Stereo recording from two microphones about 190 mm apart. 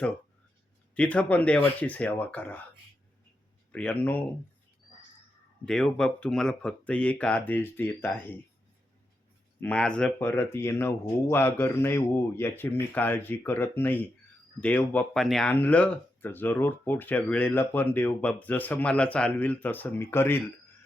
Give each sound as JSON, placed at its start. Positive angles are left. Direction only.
{"t": 0.9, "sound": "speech", "side_deg": 5}
{"t": 3.7, "sound": "speech", "side_deg": 5}
{"t": 5.6, "sound": "speech", "side_deg": 5}
{"t": 9.6, "sound": "speech", "side_deg": 5}